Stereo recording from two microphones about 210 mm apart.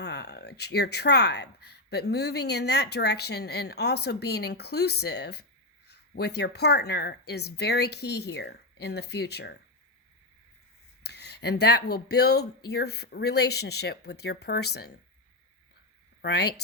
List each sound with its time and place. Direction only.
0.0 s speech: 55° left (ahead or behind)
11.0 s speech: 50° left (ahead or behind)
16.2 s speech: 50° left (ahead or behind)